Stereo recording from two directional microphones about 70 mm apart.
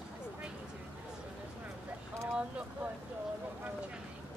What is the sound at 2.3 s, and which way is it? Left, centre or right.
Boat, centre.